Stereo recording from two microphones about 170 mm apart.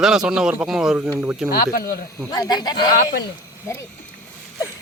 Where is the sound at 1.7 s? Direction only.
65° left (ahead or behind).